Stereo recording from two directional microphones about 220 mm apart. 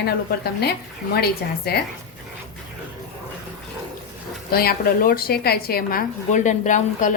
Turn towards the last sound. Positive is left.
turn(degrees=35)  # may be behind; listen again after turning